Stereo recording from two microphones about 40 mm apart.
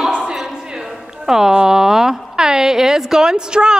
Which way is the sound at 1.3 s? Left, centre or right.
Centre.